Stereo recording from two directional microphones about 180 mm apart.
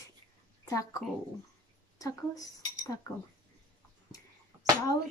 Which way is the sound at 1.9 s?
20° left (ahead or behind).